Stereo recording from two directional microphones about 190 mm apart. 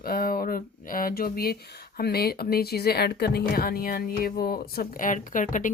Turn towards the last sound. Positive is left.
turn(degrees=45)  # may be behind; listen again after turning